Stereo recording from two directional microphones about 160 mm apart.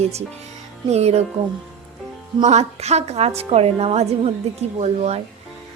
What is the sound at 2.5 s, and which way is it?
A woman's voice, 45° right (ahead or behind).